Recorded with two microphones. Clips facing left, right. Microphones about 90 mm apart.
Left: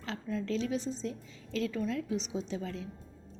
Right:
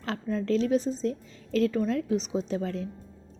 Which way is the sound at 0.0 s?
50° right (ahead or behind).